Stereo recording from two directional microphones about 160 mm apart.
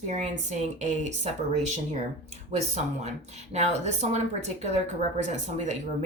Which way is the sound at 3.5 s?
45° right (ahead or behind).